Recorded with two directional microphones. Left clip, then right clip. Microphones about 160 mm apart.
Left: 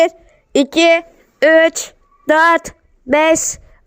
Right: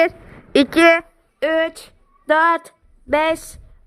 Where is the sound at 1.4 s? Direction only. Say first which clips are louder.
Left 9 dB; 25° left (ahead or behind).